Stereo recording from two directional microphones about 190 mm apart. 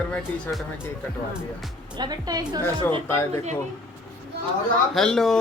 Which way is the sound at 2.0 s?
20° right (ahead or behind).